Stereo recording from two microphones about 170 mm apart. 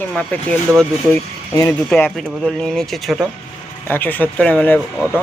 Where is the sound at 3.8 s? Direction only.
10° left (ahead or behind).